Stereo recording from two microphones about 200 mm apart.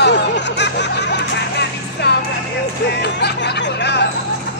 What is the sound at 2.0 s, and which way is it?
Music, 60° left (ahead or behind).